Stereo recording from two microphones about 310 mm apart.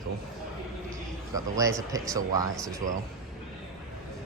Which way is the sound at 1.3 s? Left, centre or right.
Centre.